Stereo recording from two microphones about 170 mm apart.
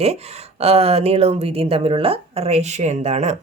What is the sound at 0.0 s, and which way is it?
Speech, 40° right (ahead or behind).